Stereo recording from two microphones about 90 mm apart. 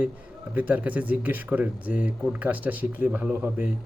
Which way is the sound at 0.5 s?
20° right (ahead or behind).